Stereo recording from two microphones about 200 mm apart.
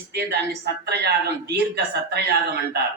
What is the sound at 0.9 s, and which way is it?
A man's voice, 55° right (ahead or behind).